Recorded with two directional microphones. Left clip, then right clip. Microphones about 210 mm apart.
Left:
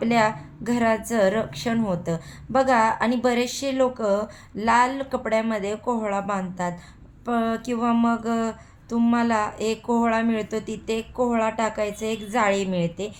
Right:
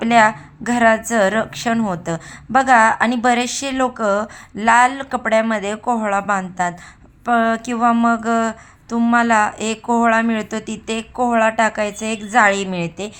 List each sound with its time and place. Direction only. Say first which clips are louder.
0.0 s a woman's voice: right 8 dB; 25° right (ahead or behind)